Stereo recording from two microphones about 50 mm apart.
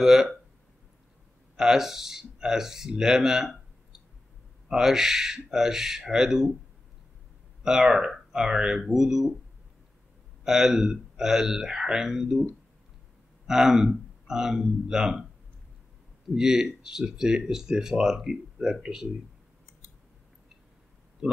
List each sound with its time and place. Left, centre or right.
0.0 s speech: centre
1.6 s speech: centre
4.6 s speech: centre
7.6 s speech: centre
10.4 s speech: centre
13.5 s speech: centre
16.3 s speech: centre
21.2 s speech: centre